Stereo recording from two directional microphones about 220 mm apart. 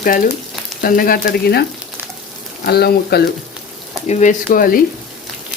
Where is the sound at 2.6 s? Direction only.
45° left (ahead or behind).